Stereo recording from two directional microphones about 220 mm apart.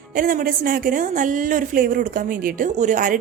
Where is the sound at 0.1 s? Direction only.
40° right (ahead or behind).